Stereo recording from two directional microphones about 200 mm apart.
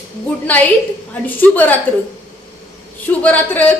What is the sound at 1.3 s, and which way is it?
Speech, 10° left (ahead or behind).